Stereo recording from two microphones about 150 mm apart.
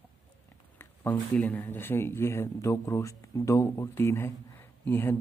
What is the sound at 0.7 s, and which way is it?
Speech, 10° left (ahead or behind).